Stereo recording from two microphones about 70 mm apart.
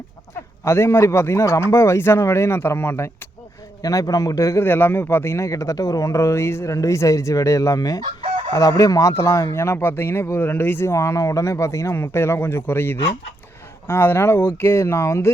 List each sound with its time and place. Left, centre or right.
0.3 s speech: left
3.8 s speech: left
4.6 s speech: left
11.9 s speech: left